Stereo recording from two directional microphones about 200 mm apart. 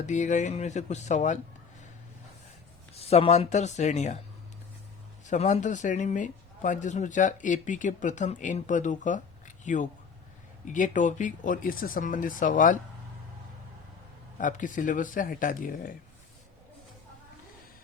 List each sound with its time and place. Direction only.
0.0 s a man's voice: 35° left (ahead or behind)
2.9 s a man's voice: 30° left (ahead or behind)
5.2 s a man's voice: 35° left (ahead or behind)
14.3 s a man's voice: 40° left (ahead or behind)